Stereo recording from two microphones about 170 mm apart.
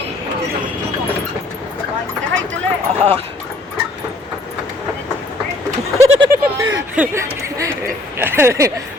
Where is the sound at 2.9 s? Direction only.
35° right (ahead or behind).